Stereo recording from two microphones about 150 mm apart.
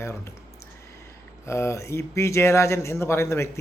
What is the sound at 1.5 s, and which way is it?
Speech, 20° left (ahead or behind).